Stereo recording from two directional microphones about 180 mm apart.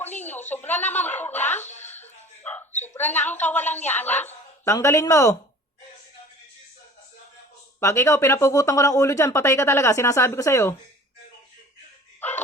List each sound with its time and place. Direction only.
0.2 s speech: 10° left (ahead or behind)
2.0 s music: 10° left (ahead or behind)
2.8 s speech: 10° left (ahead or behind)
7.8 s speech: 15° left (ahead or behind)
12.2 s dog: 10° left (ahead or behind)